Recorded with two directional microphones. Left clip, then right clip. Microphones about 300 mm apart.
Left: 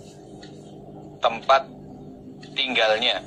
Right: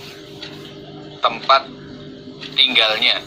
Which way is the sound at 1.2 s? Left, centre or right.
Left.